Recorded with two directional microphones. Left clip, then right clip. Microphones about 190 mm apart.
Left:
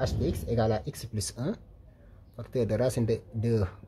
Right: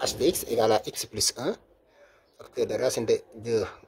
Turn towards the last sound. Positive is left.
turn(degrees=-10)  # may be behind; listen again after turning